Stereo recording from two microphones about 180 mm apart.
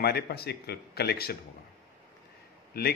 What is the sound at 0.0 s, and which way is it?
Speech, 60° left (ahead or behind).